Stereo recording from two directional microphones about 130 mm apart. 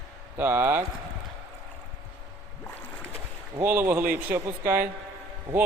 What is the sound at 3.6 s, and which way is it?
Speech, 15° right (ahead or behind).